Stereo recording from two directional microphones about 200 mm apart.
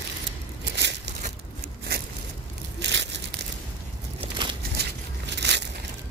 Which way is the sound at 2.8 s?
60° right (ahead or behind).